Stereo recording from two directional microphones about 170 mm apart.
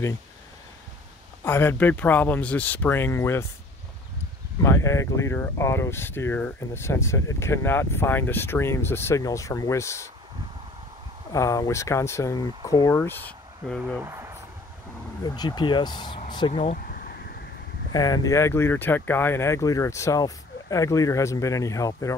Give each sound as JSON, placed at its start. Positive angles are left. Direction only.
{"t": 1.4, "sound": "speech", "side_deg": 15}
{"t": 4.6, "sound": "speech", "side_deg": 15}
{"t": 11.3, "sound": "speech", "side_deg": 20}
{"t": 14.0, "sound": "speech", "side_deg": -15}
{"t": 15.2, "sound": "speech", "side_deg": 25}
{"t": 16.7, "sound": "a sound", "side_deg": 60}
{"t": 17.9, "sound": "speech", "side_deg": 20}